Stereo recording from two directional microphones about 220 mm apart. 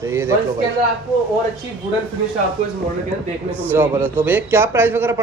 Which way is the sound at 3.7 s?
10° right (ahead or behind).